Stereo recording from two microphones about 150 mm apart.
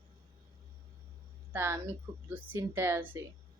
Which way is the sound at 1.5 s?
15° right (ahead or behind).